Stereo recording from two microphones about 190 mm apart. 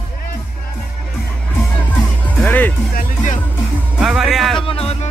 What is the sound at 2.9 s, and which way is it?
Music, 45° left (ahead or behind).